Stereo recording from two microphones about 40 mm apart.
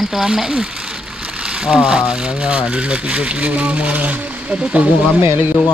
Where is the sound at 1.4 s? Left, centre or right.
Right.